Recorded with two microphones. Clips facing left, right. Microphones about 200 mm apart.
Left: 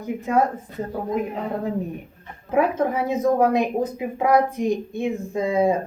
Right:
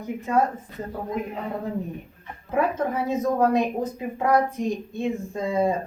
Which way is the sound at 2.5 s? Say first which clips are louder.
Left 3 dB; 10° left (ahead or behind).